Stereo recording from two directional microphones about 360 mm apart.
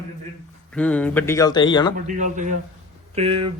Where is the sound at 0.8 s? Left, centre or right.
Centre.